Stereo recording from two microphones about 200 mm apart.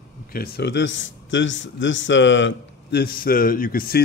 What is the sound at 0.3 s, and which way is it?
A man's voice, 50° left (ahead or behind).